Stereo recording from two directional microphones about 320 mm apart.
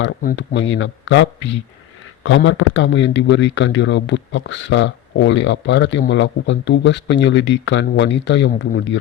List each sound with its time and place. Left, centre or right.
0.0 s speech: left